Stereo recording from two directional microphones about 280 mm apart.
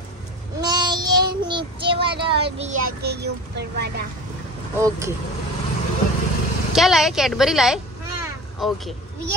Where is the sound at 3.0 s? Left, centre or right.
Right.